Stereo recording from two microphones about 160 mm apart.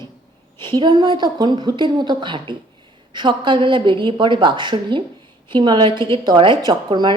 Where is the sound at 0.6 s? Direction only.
30° right (ahead or behind).